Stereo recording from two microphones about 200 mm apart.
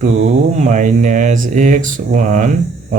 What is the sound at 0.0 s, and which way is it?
Speech, 35° right (ahead or behind).